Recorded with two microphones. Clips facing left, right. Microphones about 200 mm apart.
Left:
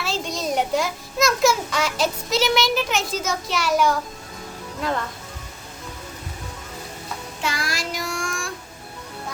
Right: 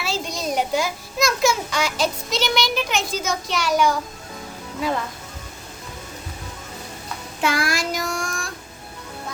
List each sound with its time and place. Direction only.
0.0 s a child's voice: centre (ahead or behind)
7.4 s child singing: 55° right (ahead or behind); by 8.4 s 40° right (ahead or behind)